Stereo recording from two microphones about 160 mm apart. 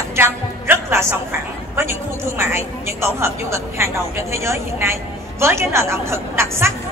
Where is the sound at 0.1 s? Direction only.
15° right (ahead or behind).